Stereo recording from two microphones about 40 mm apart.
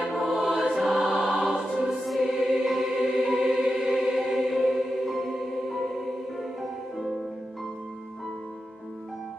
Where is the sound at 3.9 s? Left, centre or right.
Centre.